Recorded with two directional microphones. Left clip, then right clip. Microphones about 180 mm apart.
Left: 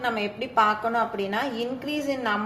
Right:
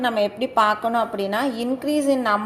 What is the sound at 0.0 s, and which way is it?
A woman's voice, 35° right (ahead or behind).